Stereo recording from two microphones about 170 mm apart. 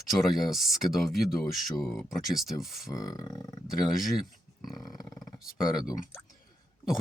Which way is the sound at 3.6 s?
Centre (ahead or behind).